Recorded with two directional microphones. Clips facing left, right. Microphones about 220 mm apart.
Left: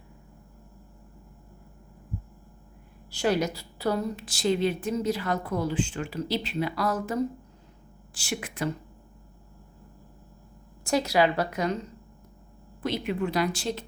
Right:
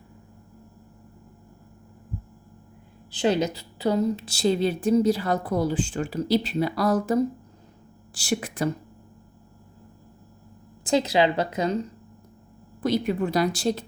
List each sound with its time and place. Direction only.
3.2 s a woman's voice: 20° right (ahead or behind)
10.8 s a woman's voice: 20° right (ahead or behind)
12.8 s a woman's voice: 40° right (ahead or behind)